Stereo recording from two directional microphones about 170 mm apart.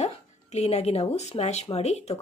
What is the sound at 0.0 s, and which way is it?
Speech, 40° left (ahead or behind).